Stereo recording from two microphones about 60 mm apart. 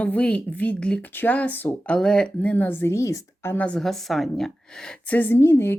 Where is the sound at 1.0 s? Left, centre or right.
Left.